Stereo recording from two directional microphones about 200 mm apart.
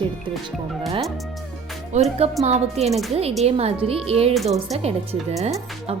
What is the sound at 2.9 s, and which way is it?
Speech, centre (ahead or behind).